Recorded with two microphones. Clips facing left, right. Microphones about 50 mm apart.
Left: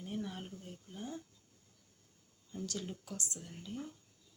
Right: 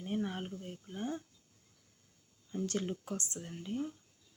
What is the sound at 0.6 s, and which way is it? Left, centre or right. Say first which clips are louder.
Speech: right 6 dB; right.